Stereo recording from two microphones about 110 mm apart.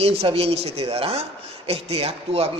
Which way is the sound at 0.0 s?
65° right (ahead or behind).